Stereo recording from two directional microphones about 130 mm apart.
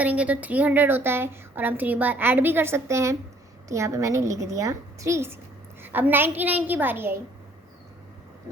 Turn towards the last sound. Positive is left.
turn(degrees=-15)  # may be behind; listen again after turning